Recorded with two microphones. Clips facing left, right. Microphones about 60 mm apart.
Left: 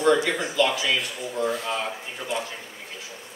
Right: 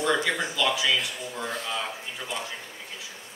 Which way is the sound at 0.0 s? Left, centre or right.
Left.